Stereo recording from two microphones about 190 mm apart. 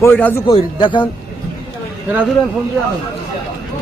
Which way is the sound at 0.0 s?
10° left (ahead or behind).